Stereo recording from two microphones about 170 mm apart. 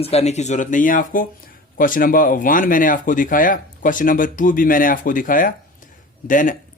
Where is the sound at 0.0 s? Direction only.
40° left (ahead or behind).